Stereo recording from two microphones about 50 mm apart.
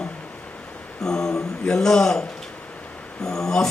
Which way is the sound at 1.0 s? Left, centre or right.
Centre.